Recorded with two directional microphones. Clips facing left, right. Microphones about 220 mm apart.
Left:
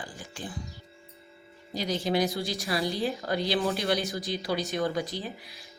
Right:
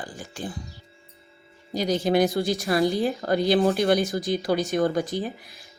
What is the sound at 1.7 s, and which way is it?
Speech, 45° right (ahead or behind).